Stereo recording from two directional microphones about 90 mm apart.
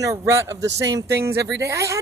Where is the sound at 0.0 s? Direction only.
30° right (ahead or behind).